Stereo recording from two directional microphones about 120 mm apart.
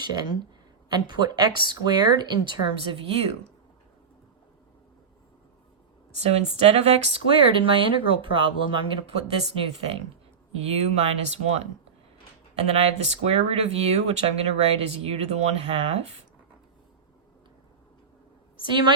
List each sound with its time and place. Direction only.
0.0 s speech: 35° right (ahead or behind); by 3.5 s 55° right (ahead or behind)
6.1 s speech: 65° right (ahead or behind); by 9.1 s 45° right (ahead or behind)
9.6 s speech: 55° right (ahead or behind)
18.6 s speech: 40° right (ahead or behind)